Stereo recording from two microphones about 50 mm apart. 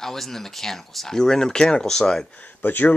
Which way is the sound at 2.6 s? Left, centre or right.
Left.